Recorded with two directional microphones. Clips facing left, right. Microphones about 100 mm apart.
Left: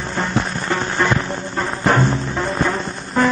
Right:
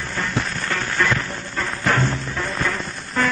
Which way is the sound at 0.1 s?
25° left (ahead or behind).